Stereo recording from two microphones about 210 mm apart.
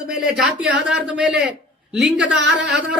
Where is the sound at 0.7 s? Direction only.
55° right (ahead or behind).